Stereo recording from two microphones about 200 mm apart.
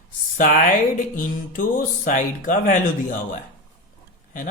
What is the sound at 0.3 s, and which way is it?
Speech, 40° left (ahead or behind).